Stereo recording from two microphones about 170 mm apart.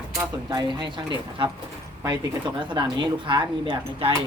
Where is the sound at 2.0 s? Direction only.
25° right (ahead or behind).